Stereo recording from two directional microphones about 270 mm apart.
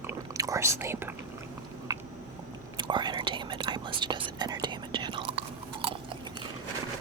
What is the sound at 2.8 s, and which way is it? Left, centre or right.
Whispering, centre.